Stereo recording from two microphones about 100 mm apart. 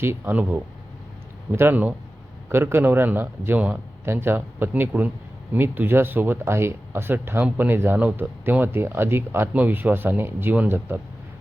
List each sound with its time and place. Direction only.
0.0 s speech: 20° right (ahead or behind)